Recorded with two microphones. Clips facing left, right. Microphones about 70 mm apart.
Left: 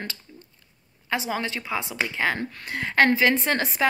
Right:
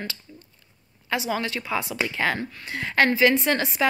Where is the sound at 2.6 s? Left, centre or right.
Left.